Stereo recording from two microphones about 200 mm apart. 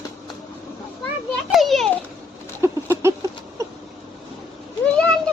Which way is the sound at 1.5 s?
Centre (ahead or behind).